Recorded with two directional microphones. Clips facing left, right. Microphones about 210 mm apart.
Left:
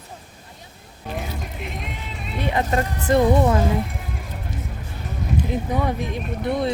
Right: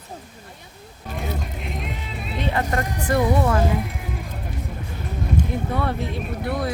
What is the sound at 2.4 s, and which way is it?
Speech, 15° left (ahead or behind).